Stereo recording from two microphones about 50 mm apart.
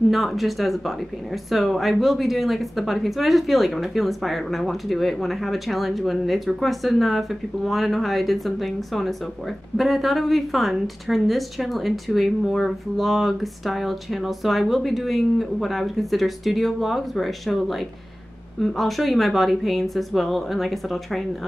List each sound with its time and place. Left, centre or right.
0.1 s speech: centre